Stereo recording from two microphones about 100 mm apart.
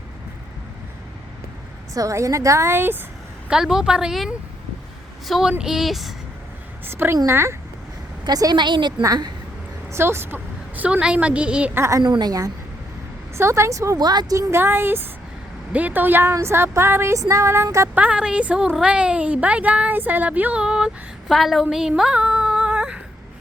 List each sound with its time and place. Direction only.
1.9 s a woman's voice: 35° right (ahead or behind)
3.5 s speech: 5° right (ahead or behind)
6.8 s a woman's voice: 20° right (ahead or behind)
8.2 s a woman's voice: 40° right (ahead or behind)
9.9 s a woman's voice: 25° right (ahead or behind)
11.8 s a woman's voice: 30° right (ahead or behind)
12.0 s a woman's voice: 45° right (ahead or behind)
13.3 s a woman's voice: 30° right (ahead or behind)
14.3 s a woman's voice: 25° right (ahead or behind)
17.9 s speech: 15° right (ahead or behind)